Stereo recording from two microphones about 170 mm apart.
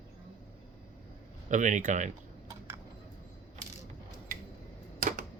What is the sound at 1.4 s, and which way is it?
Speech, 45° right (ahead or behind).